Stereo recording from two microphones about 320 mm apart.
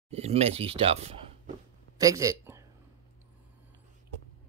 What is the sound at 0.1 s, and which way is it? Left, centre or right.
Speech, centre.